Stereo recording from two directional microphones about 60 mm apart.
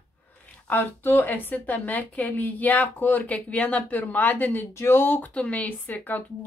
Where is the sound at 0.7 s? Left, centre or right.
Left.